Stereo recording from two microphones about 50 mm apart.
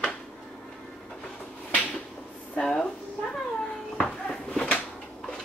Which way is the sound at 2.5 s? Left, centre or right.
Centre.